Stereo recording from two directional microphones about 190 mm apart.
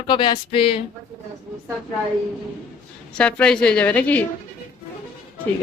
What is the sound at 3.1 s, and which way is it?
A woman's voice, 5° left (ahead or behind).